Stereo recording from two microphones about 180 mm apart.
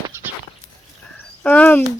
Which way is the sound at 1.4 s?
10° left (ahead or behind).